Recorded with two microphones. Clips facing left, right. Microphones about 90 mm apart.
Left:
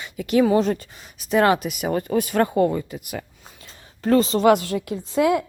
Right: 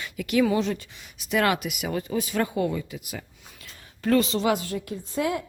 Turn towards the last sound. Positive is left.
turn(degrees=90)